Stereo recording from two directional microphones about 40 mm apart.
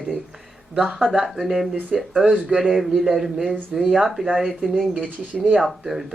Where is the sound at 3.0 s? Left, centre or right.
Centre.